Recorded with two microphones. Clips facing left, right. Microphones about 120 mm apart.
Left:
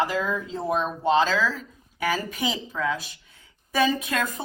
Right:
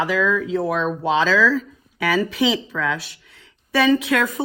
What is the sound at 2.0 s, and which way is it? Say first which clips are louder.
Speech: right 7 dB; 85° right.